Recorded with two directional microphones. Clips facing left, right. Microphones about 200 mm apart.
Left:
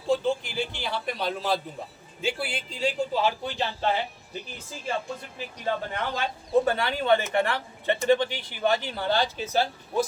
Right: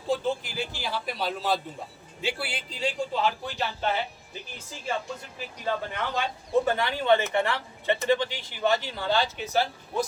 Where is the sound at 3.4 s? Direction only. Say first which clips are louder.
Left 2 dB; 25° left (ahead or behind).